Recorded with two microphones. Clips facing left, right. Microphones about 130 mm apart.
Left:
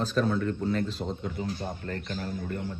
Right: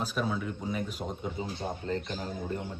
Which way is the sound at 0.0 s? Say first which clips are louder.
Left 5 dB; 10° right (ahead or behind).